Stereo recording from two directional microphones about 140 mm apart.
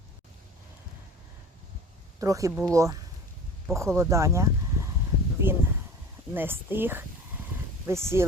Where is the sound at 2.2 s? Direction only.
25° right (ahead or behind).